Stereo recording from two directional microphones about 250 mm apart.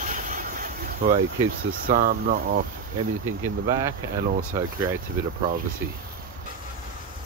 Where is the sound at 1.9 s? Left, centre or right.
Right.